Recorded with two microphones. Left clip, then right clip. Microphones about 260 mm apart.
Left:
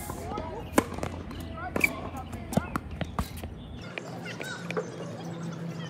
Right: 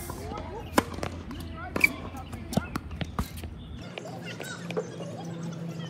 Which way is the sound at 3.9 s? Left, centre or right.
Centre.